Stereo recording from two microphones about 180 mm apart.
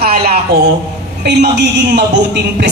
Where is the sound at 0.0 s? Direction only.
60° right (ahead or behind).